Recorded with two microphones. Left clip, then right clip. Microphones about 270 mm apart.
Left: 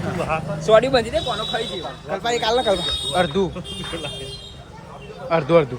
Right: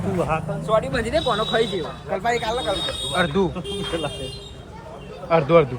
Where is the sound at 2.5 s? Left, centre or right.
Left.